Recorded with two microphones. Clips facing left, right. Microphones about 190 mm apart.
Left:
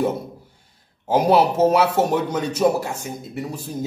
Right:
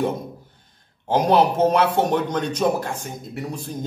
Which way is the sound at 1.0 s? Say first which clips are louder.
Left 1 dB; 5° left (ahead or behind).